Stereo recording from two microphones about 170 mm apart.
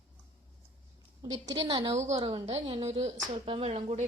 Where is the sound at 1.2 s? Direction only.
20° right (ahead or behind).